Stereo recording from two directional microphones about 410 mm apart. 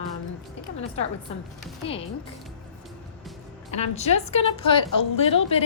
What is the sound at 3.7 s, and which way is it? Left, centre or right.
A woman's voice, centre.